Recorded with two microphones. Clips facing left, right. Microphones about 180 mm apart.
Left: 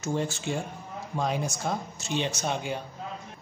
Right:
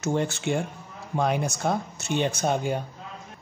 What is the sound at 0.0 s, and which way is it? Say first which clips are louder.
Speech: right 4 dB; 65° right (ahead or behind).